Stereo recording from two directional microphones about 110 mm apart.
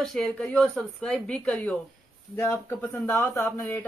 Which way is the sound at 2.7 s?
20° left (ahead or behind).